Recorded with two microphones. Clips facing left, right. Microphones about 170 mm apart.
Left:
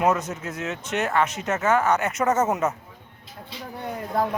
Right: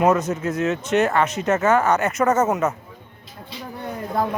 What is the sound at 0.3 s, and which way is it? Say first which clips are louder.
Speech: right 8 dB; 10° left (ahead or behind).